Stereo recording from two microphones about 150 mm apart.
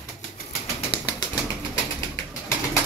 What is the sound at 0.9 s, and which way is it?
Bird, 35° left (ahead or behind).